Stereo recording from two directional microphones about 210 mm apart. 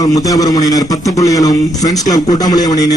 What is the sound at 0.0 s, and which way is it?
A man's voice, 15° left (ahead or behind).